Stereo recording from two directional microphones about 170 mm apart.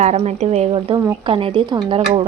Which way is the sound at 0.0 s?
40° right (ahead or behind).